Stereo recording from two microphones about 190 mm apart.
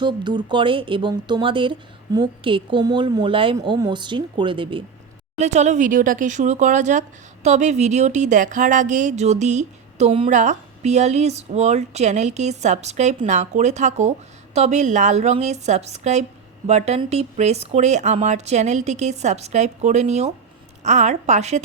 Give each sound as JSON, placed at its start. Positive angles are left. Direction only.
{"t": 0.0, "sound": "a woman's voice", "side_deg": -25}
{"t": 5.4, "sound": "speech", "side_deg": -35}